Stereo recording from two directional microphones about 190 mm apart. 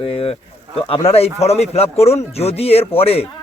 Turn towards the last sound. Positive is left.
turn(degrees=30)  # may be behind; listen again after turning